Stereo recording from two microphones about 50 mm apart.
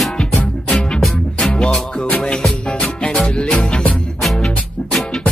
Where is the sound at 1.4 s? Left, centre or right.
Centre.